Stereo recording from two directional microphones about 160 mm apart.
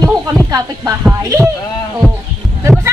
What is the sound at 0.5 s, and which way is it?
Speech, 25° right (ahead or behind).